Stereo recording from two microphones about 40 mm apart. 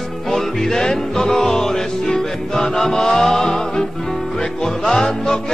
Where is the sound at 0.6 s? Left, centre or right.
Centre.